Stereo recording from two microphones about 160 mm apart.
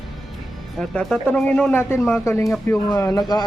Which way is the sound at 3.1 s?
25° left (ahead or behind).